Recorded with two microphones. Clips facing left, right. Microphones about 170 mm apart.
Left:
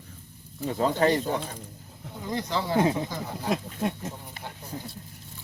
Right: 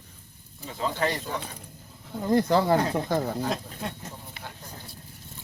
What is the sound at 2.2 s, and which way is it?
Speech, 50° right (ahead or behind).